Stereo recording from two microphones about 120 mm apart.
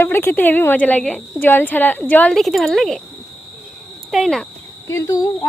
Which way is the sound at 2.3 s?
Centre (ahead or behind).